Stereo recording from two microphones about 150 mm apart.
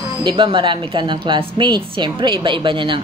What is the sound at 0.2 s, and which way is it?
A woman's voice, 30° right (ahead or behind).